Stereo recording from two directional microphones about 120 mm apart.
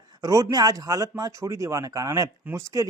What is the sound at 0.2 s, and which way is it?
Speech, 30° right (ahead or behind).